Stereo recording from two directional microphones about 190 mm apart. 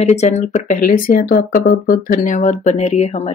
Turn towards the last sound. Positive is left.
turn(degrees=35)  # may be behind; listen again after turning